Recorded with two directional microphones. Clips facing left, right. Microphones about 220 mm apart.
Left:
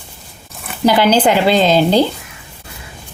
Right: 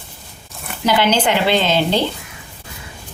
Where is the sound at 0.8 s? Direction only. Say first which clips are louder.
Left 5 dB; 40° left (ahead or behind).